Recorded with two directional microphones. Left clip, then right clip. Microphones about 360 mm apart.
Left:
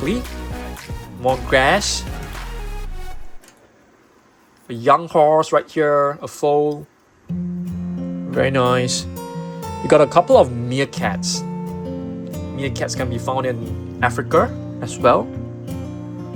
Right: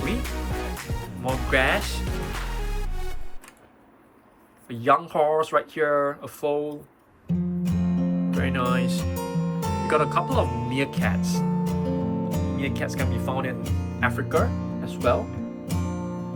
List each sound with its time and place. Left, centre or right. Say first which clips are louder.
1.2 s speech: left 7 dB; centre
4.7 s speech: left 6 dB; centre
7.3 s music: even; centre
8.4 s speech: left 11 dB; centre
9.0 s music: even; centre
9.8 s speech: left 10 dB; centre
11.3 s music: even; centre
12.5 s speech: left 9 dB; centre
15.6 s music: left 1 dB; centre